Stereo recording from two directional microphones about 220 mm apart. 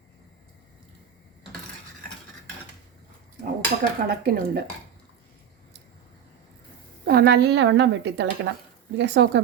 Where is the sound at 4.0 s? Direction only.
40° right (ahead or behind).